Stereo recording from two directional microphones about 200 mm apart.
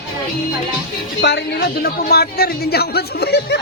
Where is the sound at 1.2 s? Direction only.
60° left (ahead or behind).